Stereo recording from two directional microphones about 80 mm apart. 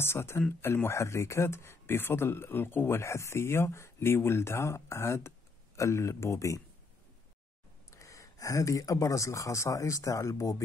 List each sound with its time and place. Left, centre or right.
0.0 s speech: left
7.9 s speech: left